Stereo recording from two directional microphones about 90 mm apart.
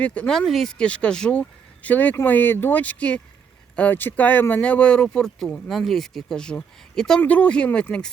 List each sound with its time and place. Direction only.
0.0 s speech: 15° left (ahead or behind)